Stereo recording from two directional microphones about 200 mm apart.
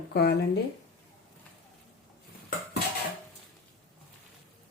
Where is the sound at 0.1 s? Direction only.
55° left (ahead or behind).